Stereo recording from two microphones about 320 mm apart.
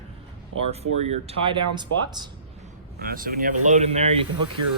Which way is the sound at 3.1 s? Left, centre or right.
Right.